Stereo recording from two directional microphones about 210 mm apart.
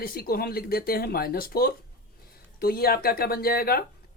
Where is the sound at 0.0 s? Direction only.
45° left (ahead or behind).